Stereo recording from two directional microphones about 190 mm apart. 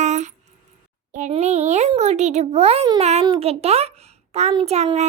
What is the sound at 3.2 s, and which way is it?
Speech, 20° right (ahead or behind).